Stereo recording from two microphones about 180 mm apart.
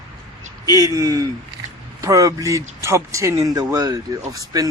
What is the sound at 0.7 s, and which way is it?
A man's voice, 20° right (ahead or behind).